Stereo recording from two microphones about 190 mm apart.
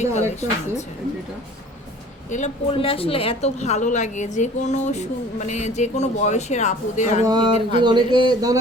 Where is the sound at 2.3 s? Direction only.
40° left (ahead or behind).